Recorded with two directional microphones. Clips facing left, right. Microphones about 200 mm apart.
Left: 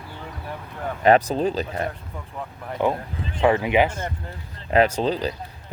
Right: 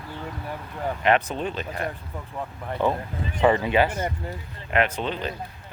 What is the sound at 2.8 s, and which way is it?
Speech, 15° left (ahead or behind).